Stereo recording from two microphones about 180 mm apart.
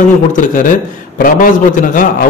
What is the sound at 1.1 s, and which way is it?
Speech, 50° left (ahead or behind).